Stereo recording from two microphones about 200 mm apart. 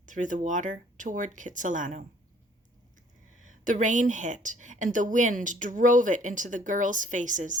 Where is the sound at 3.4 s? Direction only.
40° right (ahead or behind).